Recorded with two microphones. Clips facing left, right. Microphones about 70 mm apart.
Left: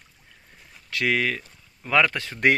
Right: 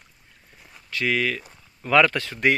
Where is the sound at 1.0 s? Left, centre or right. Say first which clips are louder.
Even; left.